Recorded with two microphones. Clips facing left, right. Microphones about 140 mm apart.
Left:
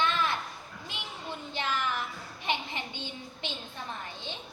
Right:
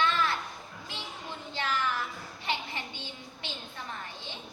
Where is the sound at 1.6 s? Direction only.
20° left (ahead or behind).